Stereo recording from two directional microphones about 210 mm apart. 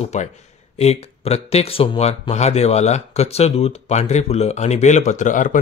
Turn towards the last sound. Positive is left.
turn(degrees=40)  # may be behind; listen again after turning